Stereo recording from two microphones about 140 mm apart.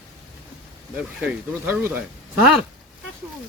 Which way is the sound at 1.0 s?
5° right (ahead or behind).